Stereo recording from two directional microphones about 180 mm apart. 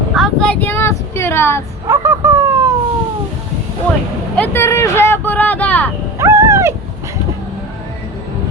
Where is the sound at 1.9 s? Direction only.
15° right (ahead or behind).